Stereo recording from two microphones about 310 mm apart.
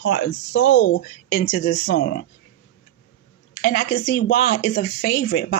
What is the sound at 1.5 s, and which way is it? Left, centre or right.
Speech, left.